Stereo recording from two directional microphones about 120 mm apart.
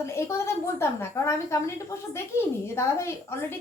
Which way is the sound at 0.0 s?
25° left (ahead or behind).